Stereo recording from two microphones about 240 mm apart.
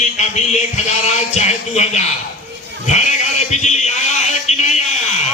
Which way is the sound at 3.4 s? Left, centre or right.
Left.